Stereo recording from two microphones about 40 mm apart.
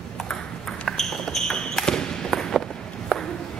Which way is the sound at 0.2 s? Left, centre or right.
Centre.